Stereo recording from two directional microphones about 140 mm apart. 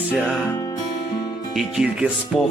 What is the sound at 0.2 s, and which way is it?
Music, centre (ahead or behind).